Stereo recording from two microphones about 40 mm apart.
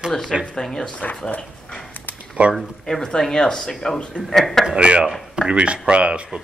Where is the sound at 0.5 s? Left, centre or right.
Centre.